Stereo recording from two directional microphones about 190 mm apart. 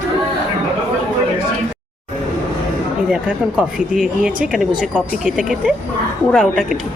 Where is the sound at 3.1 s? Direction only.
5° right (ahead or behind).